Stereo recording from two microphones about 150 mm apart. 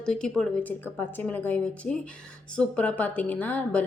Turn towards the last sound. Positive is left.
turn(degrees=10)  # may be behind; listen again after turning